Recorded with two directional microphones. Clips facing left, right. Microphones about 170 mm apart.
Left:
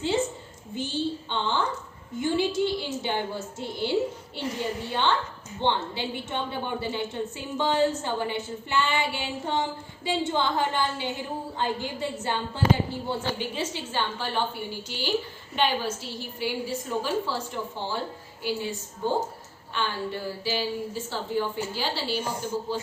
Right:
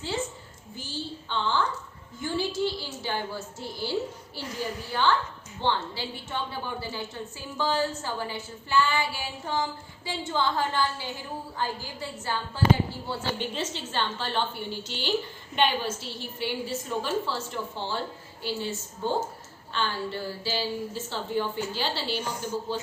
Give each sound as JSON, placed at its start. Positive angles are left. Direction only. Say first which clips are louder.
{"t": 0.8, "sound": "a woman's voice", "louder": "left 8 dB", "side_deg": 20}
{"t": 16.4, "sound": "a woman's voice", "louder": "left 1 dB", "side_deg": 5}